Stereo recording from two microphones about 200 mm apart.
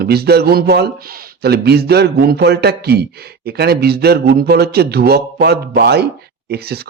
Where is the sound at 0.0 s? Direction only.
55° right (ahead or behind).